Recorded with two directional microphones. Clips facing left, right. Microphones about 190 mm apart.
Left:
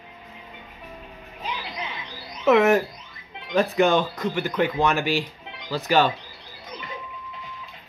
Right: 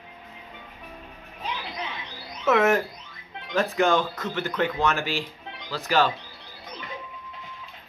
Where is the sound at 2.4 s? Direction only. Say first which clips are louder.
Left 3 dB; 15° left (ahead or behind).